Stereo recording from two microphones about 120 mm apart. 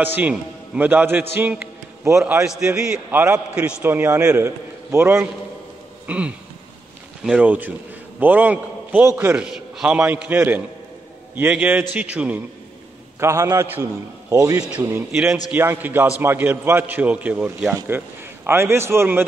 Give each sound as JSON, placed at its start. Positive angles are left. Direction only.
{"t": 0.0, "sound": "a man's voice", "side_deg": -15}
{"t": 6.0, "sound": "a sound", "side_deg": -10}
{"t": 7.2, "sound": "a man's voice", "side_deg": -10}
{"t": 13.2, "sound": "a man's voice", "side_deg": -25}